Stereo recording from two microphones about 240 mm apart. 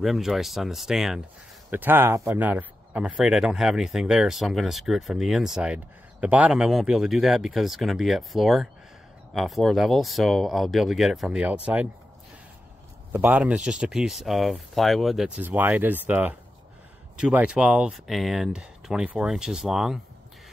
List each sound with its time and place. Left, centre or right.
0.0 s speech: centre
13.1 s speech: centre